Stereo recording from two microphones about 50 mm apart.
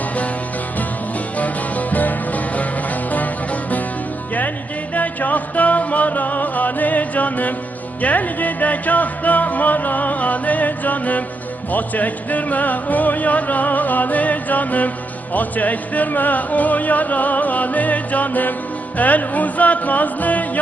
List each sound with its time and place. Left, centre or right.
1.4 s music: left
4.9 s music: left